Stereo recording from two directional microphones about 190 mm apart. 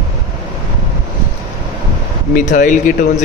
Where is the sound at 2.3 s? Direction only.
45° left (ahead or behind).